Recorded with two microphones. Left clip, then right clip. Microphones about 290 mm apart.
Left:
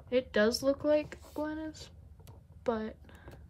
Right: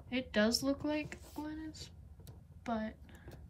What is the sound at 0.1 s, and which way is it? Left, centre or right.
Speech, centre.